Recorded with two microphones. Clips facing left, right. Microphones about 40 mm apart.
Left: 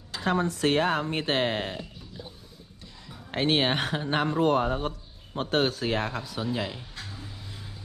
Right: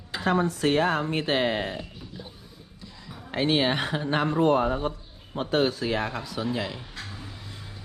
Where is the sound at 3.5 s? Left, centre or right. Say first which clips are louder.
Right 1 dB; left.